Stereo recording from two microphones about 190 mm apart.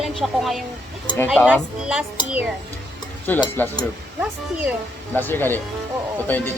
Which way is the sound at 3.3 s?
10° left (ahead or behind).